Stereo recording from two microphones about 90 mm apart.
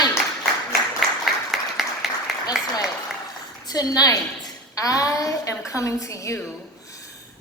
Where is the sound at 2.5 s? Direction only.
5° right (ahead or behind).